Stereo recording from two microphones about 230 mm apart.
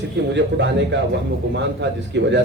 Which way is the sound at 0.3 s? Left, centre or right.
Right.